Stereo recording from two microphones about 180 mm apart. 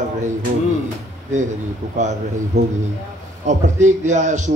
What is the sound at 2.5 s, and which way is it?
Speech, 40° right (ahead or behind).